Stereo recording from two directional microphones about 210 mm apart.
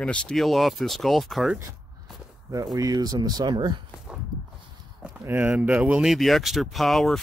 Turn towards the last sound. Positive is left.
turn(degrees=0)  # may be behind; listen again after turning